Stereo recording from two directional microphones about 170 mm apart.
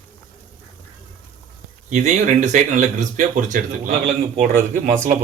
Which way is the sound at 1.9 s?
45° right (ahead or behind).